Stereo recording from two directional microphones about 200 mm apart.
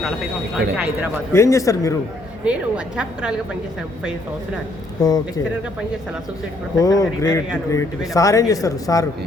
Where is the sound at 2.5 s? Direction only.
5° right (ahead or behind).